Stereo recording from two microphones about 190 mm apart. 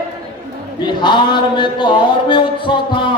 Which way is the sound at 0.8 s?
25° left (ahead or behind).